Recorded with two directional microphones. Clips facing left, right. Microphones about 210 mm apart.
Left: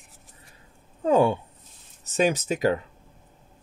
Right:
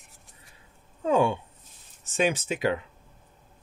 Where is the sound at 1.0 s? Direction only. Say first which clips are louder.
Left 3 dB; 40° left (ahead or behind).